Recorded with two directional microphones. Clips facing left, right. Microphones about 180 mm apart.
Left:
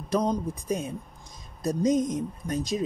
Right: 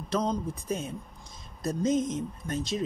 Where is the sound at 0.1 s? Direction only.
15° left (ahead or behind).